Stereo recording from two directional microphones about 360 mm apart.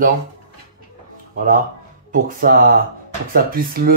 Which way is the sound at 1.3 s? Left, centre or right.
Right.